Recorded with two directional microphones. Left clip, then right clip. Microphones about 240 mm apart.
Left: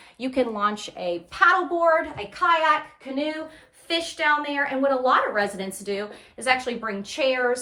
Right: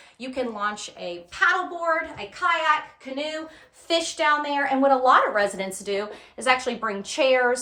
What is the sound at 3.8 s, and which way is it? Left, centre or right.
A woman's voice, centre.